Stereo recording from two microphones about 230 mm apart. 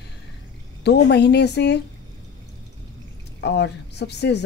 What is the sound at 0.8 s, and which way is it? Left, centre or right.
Speech, left.